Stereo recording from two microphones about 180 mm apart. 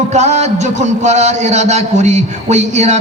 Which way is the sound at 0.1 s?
40° right (ahead or behind).